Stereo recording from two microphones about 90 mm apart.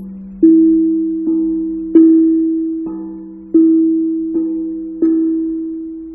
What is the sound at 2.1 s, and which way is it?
Singing bowl, 40° right (ahead or behind).